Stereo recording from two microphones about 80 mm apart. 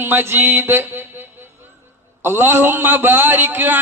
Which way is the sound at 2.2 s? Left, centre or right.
Right.